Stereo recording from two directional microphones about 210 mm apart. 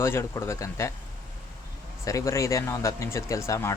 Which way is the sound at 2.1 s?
15° left (ahead or behind).